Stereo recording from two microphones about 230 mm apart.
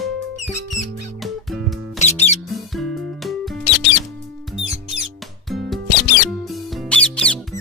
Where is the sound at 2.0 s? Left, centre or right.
Left.